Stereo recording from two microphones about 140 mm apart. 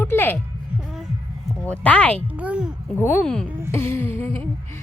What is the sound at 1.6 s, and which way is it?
Speech, 10° left (ahead or behind).